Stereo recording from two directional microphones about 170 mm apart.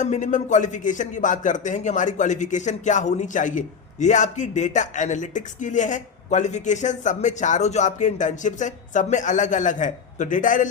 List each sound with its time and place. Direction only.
0.0 s speech: 45° left (ahead or behind)